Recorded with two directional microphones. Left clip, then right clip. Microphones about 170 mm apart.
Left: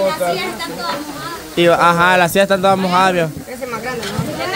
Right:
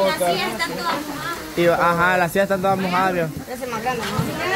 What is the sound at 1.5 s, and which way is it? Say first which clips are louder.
Speech: left 6 dB; 30° left (ahead or behind).